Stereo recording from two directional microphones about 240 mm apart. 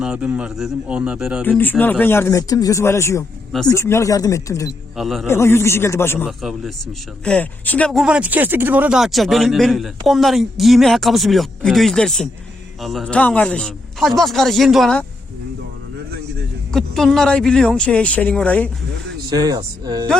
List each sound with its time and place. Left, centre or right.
0.0 s speech: centre
1.5 s speech: centre
4.9 s speech: centre
5.3 s speech: centre
6.2 s speech: centre
16.7 s speech: centre
19.3 s speech: centre